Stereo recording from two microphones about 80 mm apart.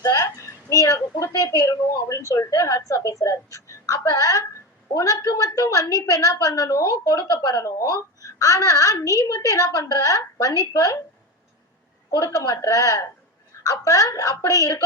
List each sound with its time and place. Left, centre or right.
0.0 s a sound: left
1.5 s a woman's voice: left
12.2 s a child's voice: left